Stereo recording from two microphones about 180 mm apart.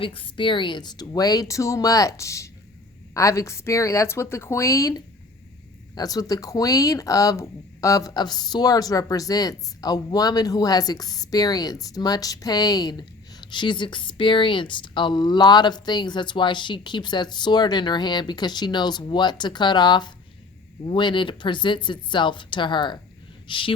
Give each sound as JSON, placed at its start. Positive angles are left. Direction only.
{"t": 0.0, "sound": "a woman's voice", "side_deg": 30}